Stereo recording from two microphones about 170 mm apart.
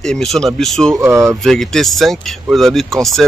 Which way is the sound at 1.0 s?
15° right (ahead or behind).